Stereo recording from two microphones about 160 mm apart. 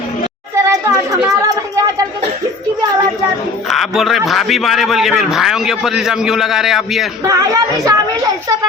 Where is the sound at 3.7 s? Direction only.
Centre (ahead or behind).